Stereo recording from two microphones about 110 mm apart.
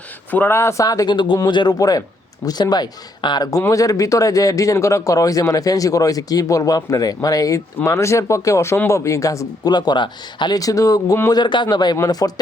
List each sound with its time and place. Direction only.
0.3 s speech: 20° left (ahead or behind)
1.1 s speech: 50° left (ahead or behind); by 9.7 s 30° left (ahead or behind)
9.7 s speech: 40° left (ahead or behind)